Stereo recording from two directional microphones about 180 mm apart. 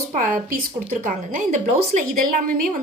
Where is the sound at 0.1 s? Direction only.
50° right (ahead or behind).